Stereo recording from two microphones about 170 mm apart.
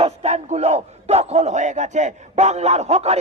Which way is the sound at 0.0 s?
40° right (ahead or behind).